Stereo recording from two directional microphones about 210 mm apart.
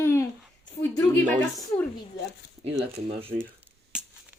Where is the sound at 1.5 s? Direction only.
15° left (ahead or behind).